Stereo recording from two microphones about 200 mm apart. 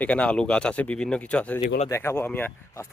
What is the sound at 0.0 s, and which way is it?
A man's voice, 5° left (ahead or behind).